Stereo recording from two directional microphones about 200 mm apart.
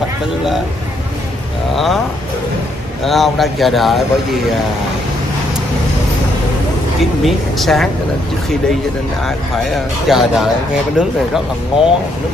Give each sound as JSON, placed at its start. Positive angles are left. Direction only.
{"t": 3.1, "sound": "a man's voice", "side_deg": 0}
{"t": 7.0, "sound": "a man's voice", "side_deg": 0}
{"t": 10.0, "sound": "a man's voice", "side_deg": 0}